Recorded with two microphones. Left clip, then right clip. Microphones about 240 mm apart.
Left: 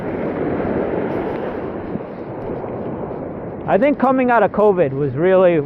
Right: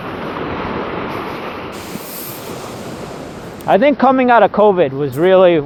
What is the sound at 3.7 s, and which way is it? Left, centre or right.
Speech, right.